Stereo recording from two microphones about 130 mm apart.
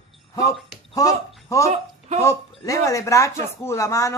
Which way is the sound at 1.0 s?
25° left (ahead or behind).